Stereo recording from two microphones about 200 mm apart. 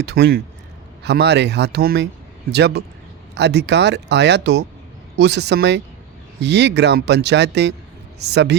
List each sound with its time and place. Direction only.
0.0 s speech: 55° right (ahead or behind)